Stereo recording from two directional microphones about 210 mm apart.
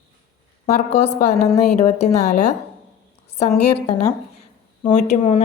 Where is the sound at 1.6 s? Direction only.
35° left (ahead or behind).